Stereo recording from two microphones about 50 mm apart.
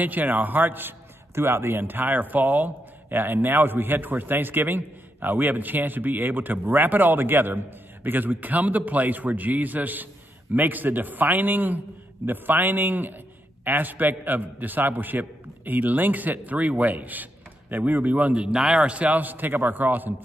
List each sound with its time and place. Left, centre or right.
0.0 s a man's voice: right; by 18.9 s centre
18.9 s a man's voice: right